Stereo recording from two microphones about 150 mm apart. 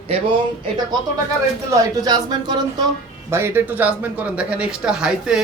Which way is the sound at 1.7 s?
25° right (ahead or behind).